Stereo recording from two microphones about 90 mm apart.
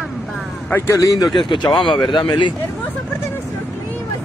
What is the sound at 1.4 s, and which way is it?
Speech, 65° left (ahead or behind).